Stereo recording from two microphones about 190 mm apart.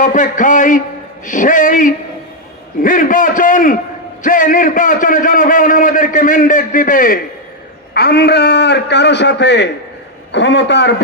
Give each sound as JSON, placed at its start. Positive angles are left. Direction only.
{"t": 0.0, "sound": "a man's voice", "side_deg": 40}
{"t": 7.9, "sound": "a man's voice", "side_deg": 60}